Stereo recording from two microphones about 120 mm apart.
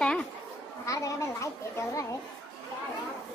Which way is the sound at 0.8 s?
25° left (ahead or behind).